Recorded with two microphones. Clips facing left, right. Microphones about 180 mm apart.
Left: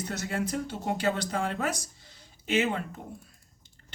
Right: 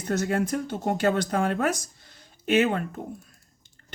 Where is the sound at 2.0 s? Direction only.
55° right (ahead or behind).